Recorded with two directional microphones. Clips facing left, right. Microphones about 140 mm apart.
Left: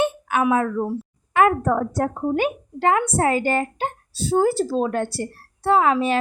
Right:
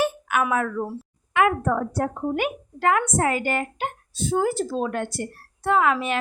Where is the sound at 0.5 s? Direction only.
30° left (ahead or behind).